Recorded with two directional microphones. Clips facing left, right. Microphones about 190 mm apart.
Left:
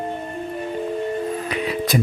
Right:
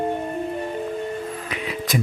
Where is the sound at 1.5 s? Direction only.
35° left (ahead or behind).